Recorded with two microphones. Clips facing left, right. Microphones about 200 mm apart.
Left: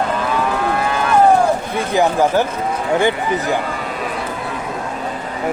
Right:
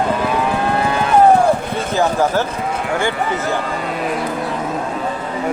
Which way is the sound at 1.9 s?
15° left (ahead or behind).